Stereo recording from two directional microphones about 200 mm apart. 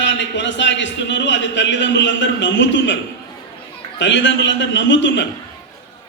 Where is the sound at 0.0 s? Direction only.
60° left (ahead or behind).